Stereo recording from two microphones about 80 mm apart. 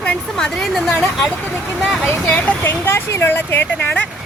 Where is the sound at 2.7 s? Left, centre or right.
Left.